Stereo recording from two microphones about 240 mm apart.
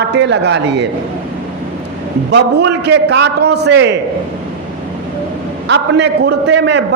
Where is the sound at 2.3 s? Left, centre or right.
Right.